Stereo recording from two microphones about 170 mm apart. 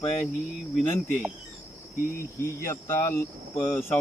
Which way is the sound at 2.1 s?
15° left (ahead or behind).